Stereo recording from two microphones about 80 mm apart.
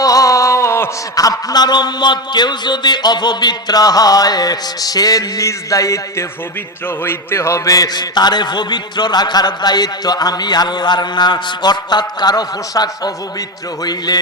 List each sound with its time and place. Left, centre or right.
0.0 s a sound: left
1.1 s a man's voice: left
7.0 s a man's voice: left
14.1 s a man's voice: left